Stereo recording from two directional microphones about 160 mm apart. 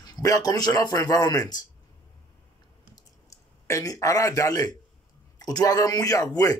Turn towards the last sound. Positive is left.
turn(degrees=25)  # may be behind; listen again after turning